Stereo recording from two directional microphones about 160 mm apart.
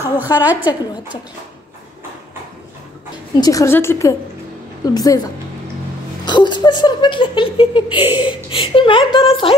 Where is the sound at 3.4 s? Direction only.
20° left (ahead or behind).